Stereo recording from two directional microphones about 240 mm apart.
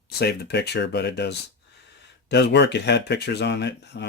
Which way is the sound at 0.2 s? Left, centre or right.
Left.